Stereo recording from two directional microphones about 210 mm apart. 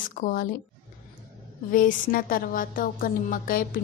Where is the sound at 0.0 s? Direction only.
40° left (ahead or behind).